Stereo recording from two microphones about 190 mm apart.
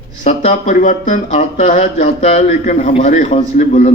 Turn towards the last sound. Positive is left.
turn(degrees=40)  # may be behind; listen again after turning